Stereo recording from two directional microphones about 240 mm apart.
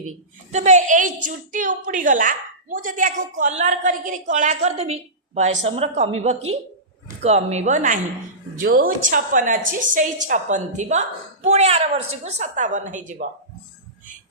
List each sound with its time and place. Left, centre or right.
0.5 s a woman's voice: right
7.2 s a woman's voice: right